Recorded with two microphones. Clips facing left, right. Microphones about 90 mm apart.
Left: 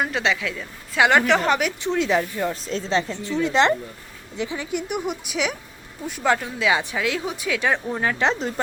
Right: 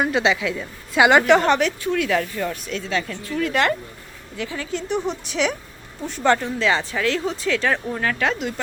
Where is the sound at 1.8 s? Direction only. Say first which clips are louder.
Even; 25° left (ahead or behind).